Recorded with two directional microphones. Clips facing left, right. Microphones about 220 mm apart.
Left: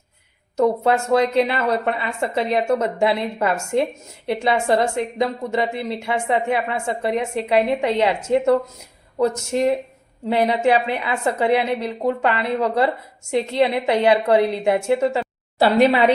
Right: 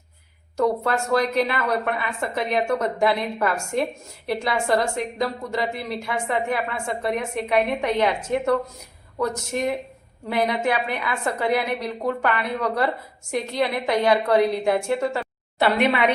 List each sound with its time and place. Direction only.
0.5 s a woman's voice: 25° left (ahead or behind)